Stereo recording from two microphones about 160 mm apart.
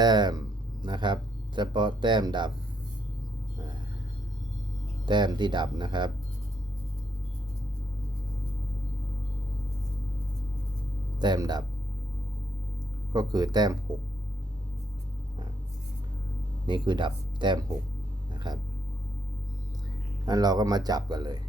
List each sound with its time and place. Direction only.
0.0 s speech: 25° right (ahead or behind)
5.0 s speech: 30° right (ahead or behind)
11.2 s speech: 25° right (ahead or behind)
13.1 s speech: 25° right (ahead or behind)
16.6 s speech: 30° right (ahead or behind)
20.2 s speech: 25° right (ahead or behind)